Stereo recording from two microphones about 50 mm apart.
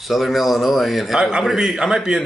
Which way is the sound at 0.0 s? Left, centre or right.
Centre.